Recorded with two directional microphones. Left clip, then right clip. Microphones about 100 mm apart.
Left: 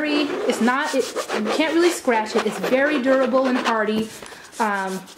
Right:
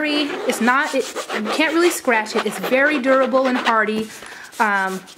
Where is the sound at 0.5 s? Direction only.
45° right (ahead or behind).